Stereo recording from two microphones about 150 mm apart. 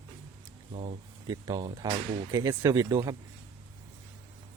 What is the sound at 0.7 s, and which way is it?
Speech, 40° right (ahead or behind).